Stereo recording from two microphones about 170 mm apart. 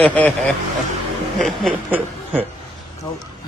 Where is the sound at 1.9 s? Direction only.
10° right (ahead or behind).